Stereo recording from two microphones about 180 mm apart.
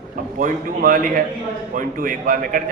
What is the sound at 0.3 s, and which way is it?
A man's voice, 50° right (ahead or behind).